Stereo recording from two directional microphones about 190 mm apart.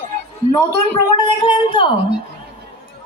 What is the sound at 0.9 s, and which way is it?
Speech, 25° left (ahead or behind).